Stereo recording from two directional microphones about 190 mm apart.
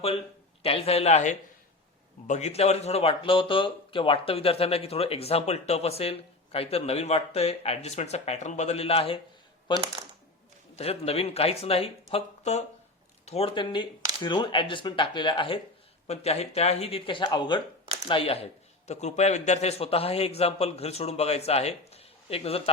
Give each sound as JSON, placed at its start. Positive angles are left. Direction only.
{"t": 0.6, "sound": "speech", "side_deg": 30}
{"t": 9.7, "sound": "speech", "side_deg": -25}
{"t": 10.8, "sound": "speech", "side_deg": 35}